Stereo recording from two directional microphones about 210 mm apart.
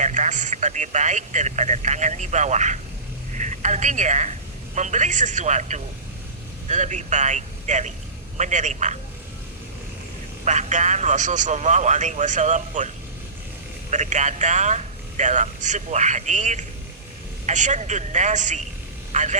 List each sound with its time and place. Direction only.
0.0 s a woman's voice: 35° right (ahead or behind)
10.4 s speech: 35° right (ahead or behind)
13.9 s speech: 35° right (ahead or behind)